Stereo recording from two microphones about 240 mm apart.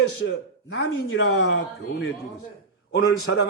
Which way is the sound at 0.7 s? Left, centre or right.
Left.